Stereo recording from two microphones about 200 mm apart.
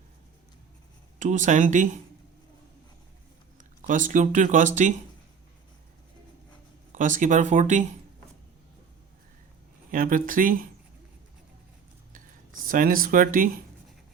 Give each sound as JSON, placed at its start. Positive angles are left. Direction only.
{"t": 1.2, "sound": "speech", "side_deg": -40}
{"t": 3.6, "sound": "speech", "side_deg": -40}
{"t": 6.9, "sound": "speech", "side_deg": -40}
{"t": 9.9, "sound": "speech", "side_deg": -45}
{"t": 12.6, "sound": "speech", "side_deg": -45}